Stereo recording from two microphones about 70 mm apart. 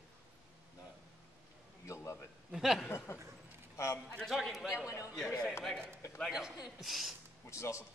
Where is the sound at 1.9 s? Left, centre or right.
Left.